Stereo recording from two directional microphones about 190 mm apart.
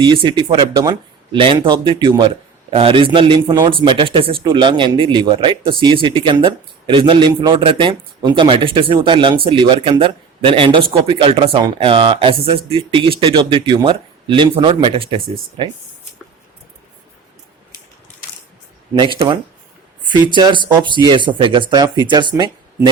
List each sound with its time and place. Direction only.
0.0 s speech: 25° right (ahead or behind)
18.9 s speech: 25° right (ahead or behind)